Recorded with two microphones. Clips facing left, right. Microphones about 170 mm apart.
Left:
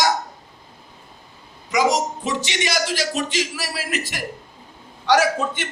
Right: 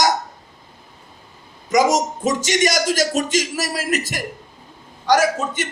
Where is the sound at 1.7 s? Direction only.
45° right (ahead or behind).